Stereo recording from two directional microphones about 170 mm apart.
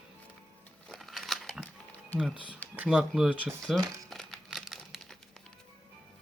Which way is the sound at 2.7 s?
5° right (ahead or behind).